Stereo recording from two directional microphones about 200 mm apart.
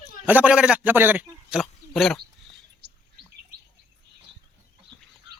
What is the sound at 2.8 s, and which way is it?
Bird, 55° right (ahead or behind).